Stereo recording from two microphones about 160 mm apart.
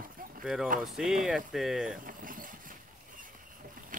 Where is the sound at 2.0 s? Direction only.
60° right (ahead or behind).